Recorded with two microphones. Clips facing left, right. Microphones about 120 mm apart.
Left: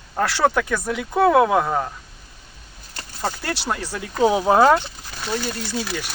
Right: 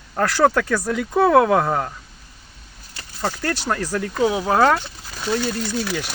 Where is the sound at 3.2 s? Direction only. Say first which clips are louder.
Right 2 dB; 15° left (ahead or behind).